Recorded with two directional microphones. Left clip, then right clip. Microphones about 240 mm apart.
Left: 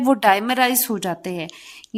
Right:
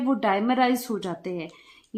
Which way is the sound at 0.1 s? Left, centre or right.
Left.